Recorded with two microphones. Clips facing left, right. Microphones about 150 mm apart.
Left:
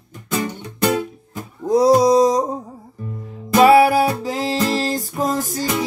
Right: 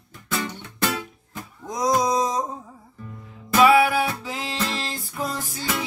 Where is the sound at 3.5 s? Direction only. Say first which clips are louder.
Left 5 dB; 40° left (ahead or behind).